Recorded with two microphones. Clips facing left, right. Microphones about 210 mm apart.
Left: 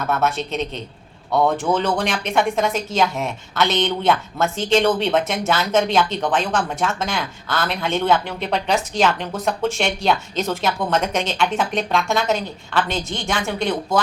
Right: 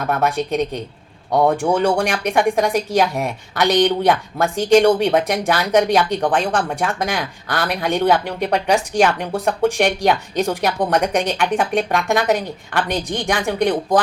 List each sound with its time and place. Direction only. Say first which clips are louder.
0.1 s a woman's voice: right 3 dB; 15° right (ahead or behind)